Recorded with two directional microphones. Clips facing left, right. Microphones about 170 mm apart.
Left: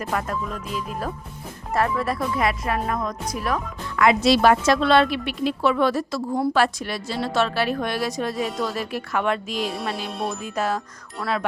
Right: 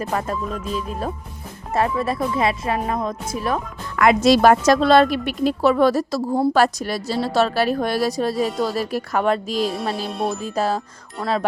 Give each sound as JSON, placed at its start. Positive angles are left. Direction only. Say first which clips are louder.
{"t": 0.1, "sound": "speech", "louder": "even", "side_deg": -30}
{"t": 1.7, "sound": "speech", "louder": "right 2 dB", "side_deg": -25}
{"t": 3.9, "sound": "a woman's voice", "louder": "right 3 dB", "side_deg": -45}
{"t": 9.9, "sound": "music", "louder": "right 4 dB", "side_deg": 0}
{"t": 10.4, "sound": "a woman's voice", "louder": "right 2 dB", "side_deg": -30}